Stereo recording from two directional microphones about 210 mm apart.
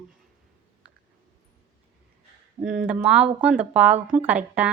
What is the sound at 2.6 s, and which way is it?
Speech, centre (ahead or behind).